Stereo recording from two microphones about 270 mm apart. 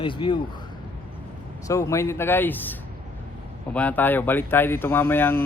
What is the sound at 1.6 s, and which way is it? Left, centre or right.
A man's voice, centre.